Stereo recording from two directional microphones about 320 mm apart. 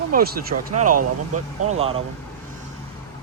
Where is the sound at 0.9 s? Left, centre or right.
Right.